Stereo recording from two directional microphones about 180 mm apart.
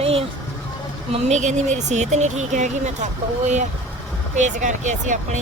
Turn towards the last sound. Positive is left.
turn(degrees=-45)  # may be behind; listen again after turning